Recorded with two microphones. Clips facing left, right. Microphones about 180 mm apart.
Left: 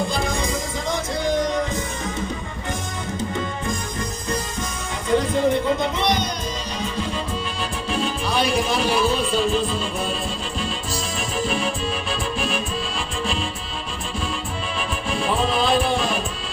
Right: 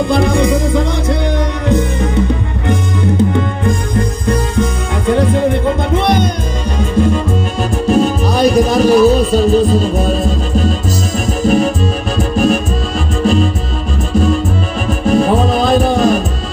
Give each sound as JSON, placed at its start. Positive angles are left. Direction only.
{"t": 0.1, "sound": "music", "side_deg": -60}